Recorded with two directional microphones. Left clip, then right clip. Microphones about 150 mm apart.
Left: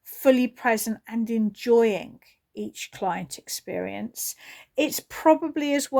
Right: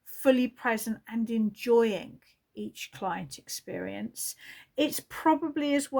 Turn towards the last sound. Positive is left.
turn(degrees=45)  # may be behind; listen again after turning